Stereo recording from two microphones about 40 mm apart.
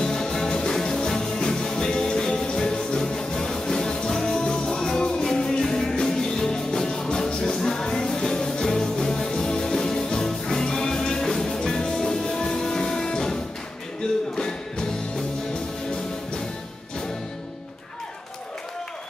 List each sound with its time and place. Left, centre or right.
0.0 s music: centre